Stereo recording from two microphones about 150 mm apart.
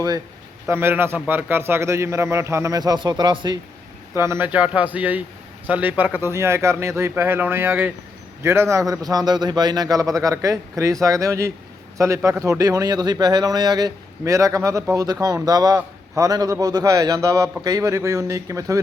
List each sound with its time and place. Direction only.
0.7 s a man's voice: 15° right (ahead or behind)
4.1 s a man's voice: 15° right (ahead or behind)